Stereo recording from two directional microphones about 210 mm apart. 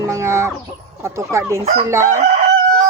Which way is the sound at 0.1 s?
15° right (ahead or behind).